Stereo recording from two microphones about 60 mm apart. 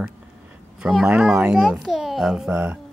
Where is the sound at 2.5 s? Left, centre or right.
Right.